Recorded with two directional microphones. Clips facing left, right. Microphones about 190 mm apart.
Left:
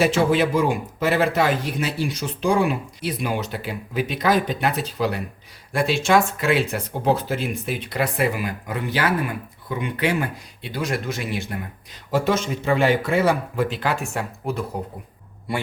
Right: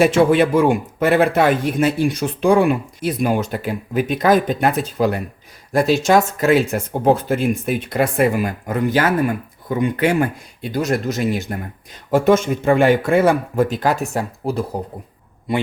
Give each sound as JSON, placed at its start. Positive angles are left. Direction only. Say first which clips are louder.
{"t": 0.0, "sound": "speech", "louder": "right 5 dB", "side_deg": -55}